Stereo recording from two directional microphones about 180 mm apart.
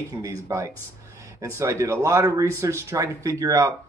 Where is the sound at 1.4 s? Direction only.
15° right (ahead or behind).